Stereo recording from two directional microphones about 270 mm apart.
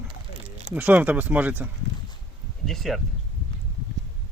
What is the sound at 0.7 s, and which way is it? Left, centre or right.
Speech, centre.